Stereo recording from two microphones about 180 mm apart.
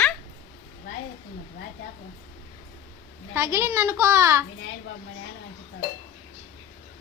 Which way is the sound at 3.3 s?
15° right (ahead or behind).